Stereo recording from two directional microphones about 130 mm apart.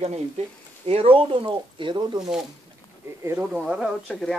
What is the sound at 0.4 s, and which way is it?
Speech, 55° right (ahead or behind).